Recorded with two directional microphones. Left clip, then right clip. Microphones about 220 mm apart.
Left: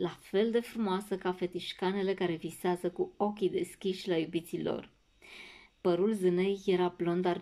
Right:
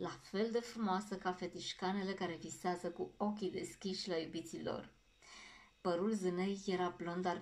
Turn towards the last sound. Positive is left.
turn(degrees=35)  # may be behind; listen again after turning